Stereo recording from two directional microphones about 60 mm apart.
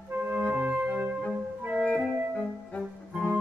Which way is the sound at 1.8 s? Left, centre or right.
Centre.